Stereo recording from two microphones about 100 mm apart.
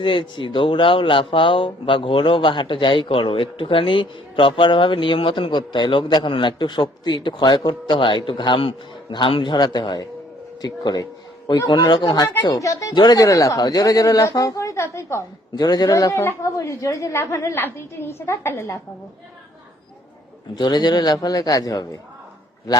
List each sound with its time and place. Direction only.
0.0 s a man's voice: 55° left (ahead or behind); by 15.2 s 30° left (ahead or behind)
15.5 s a woman's voice: 40° left (ahead or behind)
20.6 s speech: 45° left (ahead or behind)